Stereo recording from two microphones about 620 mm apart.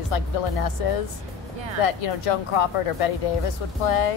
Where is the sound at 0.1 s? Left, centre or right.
Left.